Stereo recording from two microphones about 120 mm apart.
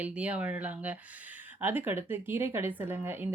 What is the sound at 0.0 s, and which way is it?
Speech, 10° right (ahead or behind).